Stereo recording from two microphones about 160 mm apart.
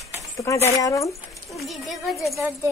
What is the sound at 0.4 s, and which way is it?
Speech, 15° left (ahead or behind).